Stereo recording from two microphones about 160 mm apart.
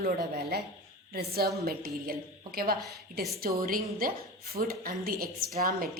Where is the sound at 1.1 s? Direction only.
75° right (ahead or behind).